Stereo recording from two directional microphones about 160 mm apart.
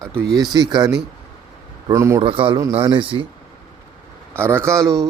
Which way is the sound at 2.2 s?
35° right (ahead or behind).